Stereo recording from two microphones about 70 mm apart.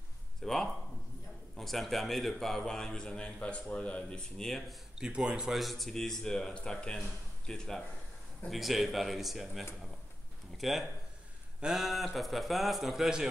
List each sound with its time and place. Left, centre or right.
0.4 s speech: centre